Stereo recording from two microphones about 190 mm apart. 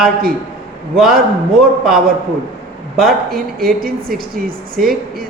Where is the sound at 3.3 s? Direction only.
50° right (ahead or behind).